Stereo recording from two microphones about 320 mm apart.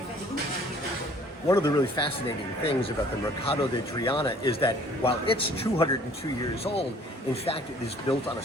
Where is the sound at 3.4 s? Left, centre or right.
Centre.